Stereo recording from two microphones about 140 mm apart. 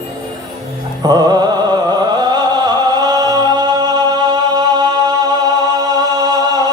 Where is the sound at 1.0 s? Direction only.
30° right (ahead or behind).